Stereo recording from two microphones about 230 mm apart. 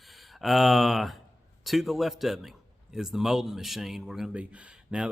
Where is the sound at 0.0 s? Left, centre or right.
Centre.